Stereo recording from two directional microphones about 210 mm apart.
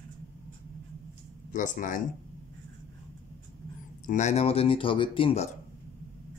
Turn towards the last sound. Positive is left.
turn(degrees=30)  # may be behind; listen again after turning